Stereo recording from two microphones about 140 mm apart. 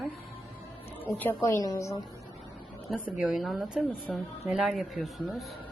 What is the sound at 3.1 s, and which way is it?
Speech, 5° right (ahead or behind).